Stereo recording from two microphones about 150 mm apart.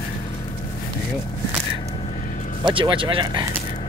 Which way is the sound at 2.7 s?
35° right (ahead or behind).